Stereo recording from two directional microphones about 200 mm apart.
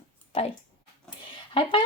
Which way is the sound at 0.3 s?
30° left (ahead or behind).